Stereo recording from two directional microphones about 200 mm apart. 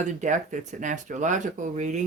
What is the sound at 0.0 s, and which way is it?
Speech, 40° right (ahead or behind).